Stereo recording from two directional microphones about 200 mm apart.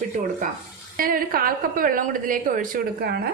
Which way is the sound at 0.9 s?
45° right (ahead or behind).